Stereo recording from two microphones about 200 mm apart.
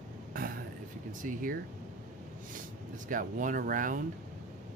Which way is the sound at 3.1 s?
45° right (ahead or behind).